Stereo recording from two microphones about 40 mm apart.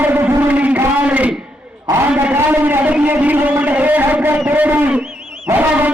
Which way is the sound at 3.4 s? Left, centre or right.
Right.